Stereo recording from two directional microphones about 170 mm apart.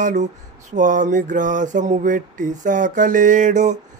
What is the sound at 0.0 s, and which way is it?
Mantra, 45° right (ahead or behind).